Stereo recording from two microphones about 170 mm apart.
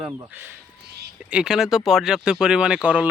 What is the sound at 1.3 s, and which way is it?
Speech, 5° right (ahead or behind).